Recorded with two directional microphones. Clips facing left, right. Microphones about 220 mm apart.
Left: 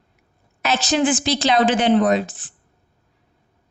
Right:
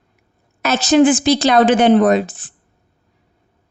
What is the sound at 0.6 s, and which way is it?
A woman's voice, 45° right (ahead or behind).